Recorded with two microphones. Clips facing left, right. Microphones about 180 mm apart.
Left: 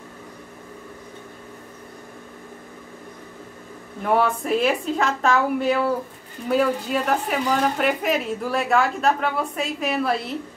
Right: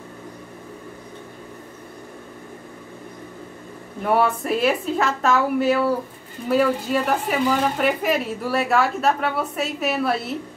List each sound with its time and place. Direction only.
4.0 s a woman's voice: 5° right (ahead or behind)